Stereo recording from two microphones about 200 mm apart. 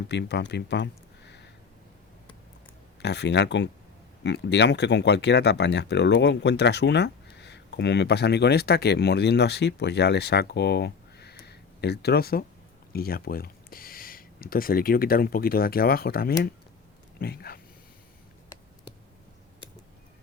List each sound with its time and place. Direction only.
0.1 s speech: 60° left (ahead or behind)
3.0 s speech: 60° left (ahead or behind)